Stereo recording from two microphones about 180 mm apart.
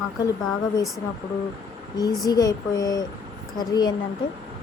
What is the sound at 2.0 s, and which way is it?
Speech, 20° left (ahead or behind).